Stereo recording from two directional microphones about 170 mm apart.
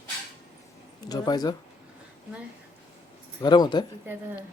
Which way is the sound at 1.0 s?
20° left (ahead or behind).